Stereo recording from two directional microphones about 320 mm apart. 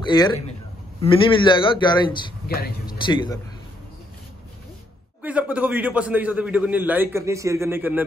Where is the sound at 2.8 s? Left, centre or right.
Centre.